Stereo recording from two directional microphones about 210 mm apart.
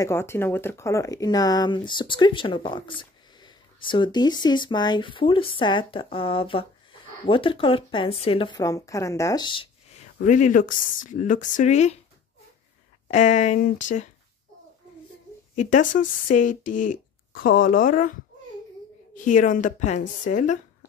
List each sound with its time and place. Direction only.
0.0 s speech: 10° left (ahead or behind)
10.2 s speech: 35° left (ahead or behind)
13.1 s speech: 35° left (ahead or behind)
15.5 s speech: 35° left (ahead or behind)
19.1 s speech: 35° left (ahead or behind)